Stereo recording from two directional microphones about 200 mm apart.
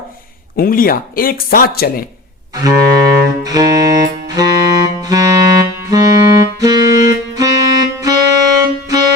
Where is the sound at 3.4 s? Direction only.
20° right (ahead or behind).